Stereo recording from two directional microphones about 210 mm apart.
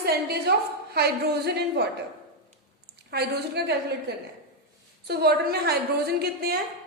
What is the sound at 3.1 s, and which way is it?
Speech, 50° right (ahead or behind).